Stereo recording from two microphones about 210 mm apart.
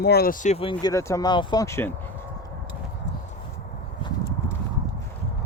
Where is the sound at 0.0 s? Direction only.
50° left (ahead or behind); by 1.9 s 15° left (ahead or behind).